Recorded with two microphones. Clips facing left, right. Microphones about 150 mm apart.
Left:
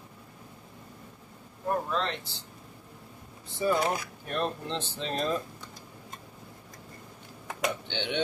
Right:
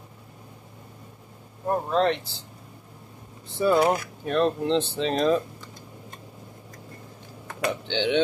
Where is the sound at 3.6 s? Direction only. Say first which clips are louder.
Right 6 dB; 80° right.